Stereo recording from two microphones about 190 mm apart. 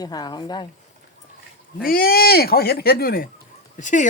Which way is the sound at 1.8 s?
50° left (ahead or behind).